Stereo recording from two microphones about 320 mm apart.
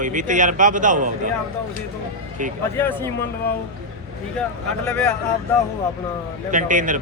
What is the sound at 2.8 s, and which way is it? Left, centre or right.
Speech, centre.